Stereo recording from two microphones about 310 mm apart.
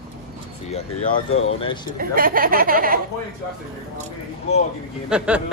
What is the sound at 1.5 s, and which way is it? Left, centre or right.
Speech, centre.